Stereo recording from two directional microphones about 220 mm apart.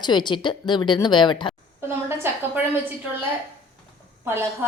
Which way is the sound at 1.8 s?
10° right (ahead or behind).